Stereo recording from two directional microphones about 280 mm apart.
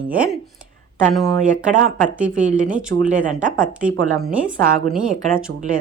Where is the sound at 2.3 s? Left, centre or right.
Right.